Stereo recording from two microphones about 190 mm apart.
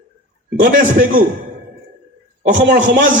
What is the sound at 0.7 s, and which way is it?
Speech, 45° right (ahead or behind).